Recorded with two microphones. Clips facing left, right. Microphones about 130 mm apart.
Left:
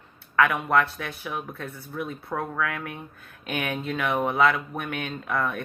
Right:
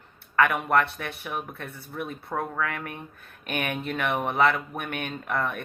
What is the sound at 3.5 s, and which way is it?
Speech, 60° right (ahead or behind).